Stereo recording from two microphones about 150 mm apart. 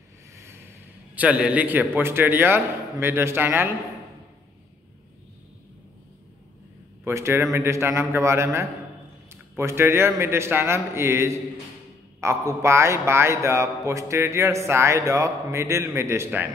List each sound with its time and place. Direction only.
1.1 s a man's voice: 10° right (ahead or behind)
7.1 s a man's voice: 15° right (ahead or behind)